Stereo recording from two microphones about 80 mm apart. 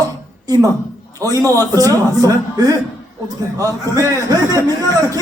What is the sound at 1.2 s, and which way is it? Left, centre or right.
A man's voice, right.